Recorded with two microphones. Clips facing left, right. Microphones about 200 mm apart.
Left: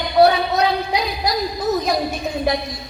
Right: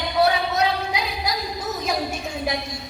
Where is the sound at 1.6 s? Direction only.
35° left (ahead or behind).